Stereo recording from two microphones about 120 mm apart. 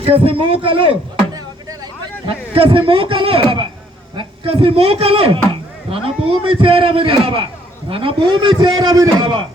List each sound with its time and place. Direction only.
0.0 s a man's voice: 55° right (ahead or behind); by 9.4 s 35° right (ahead or behind)